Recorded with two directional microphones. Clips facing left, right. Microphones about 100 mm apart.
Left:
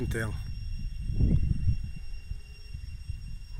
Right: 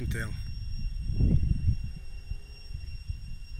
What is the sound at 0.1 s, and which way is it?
Speech, 35° left (ahead or behind).